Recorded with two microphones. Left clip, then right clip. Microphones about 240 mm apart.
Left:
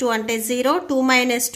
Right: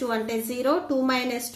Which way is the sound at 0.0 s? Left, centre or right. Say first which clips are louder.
Left 6 dB; left.